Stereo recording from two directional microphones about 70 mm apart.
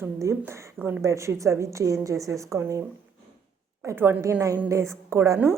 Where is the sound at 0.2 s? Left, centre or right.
Right.